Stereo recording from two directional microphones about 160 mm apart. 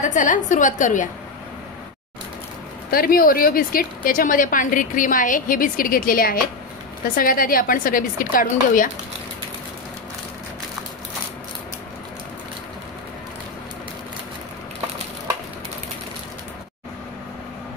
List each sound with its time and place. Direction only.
0.0 s a woman's voice: 50° left (ahead or behind)
2.9 s a woman's voice: 65° left (ahead or behind)